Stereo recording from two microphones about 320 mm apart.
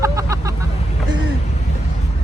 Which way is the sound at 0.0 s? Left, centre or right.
Centre.